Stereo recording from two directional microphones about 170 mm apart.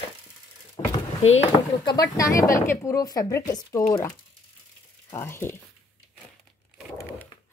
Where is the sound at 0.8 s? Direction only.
25° left (ahead or behind).